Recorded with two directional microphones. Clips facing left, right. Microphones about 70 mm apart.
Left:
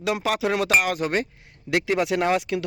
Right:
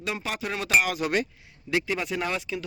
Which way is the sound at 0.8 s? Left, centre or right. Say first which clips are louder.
Left 2 dB; left.